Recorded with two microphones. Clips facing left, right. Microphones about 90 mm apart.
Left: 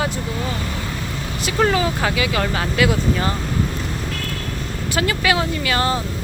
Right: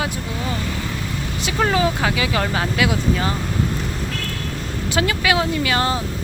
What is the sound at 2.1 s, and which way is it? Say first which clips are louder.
Speech: even; 20° right (ahead or behind).